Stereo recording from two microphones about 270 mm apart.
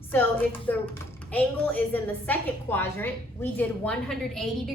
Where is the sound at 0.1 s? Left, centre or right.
Centre.